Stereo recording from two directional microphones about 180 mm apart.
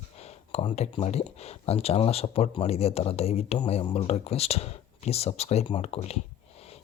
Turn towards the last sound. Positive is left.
turn(degrees=35)  # may be behind; listen again after turning